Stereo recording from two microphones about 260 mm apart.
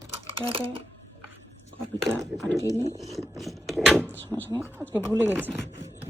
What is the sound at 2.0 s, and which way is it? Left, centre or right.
Speech, centre.